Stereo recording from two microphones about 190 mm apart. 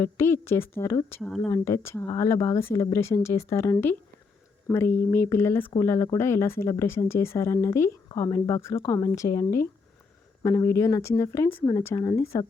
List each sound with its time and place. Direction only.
0.0 s speech: 15° left (ahead or behind)